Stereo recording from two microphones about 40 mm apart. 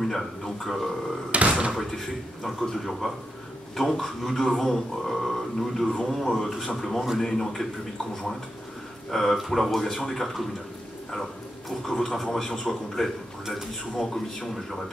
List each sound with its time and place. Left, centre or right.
0.0 s speech: centre
1.3 s speech: right
1.8 s speech: centre
11.8 s speech: centre